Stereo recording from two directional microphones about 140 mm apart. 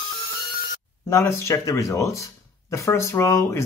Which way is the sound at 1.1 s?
20° left (ahead or behind).